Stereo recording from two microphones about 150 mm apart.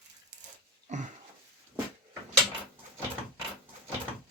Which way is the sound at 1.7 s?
15° right (ahead or behind).